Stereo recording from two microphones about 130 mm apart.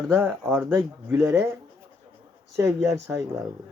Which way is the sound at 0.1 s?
15° right (ahead or behind).